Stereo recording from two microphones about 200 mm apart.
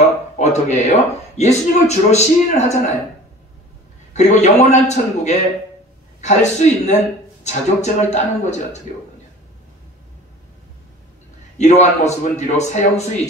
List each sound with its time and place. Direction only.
0.4 s speech: 35° left (ahead or behind)
4.1 s speech: 35° left (ahead or behind)
11.5 s speech: 35° left (ahead or behind)